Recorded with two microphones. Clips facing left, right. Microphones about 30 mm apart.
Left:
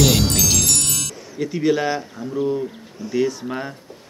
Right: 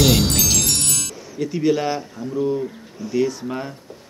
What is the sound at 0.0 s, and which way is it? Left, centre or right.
Chime, centre.